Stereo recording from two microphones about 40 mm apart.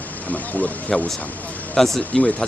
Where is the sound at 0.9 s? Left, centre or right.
Centre.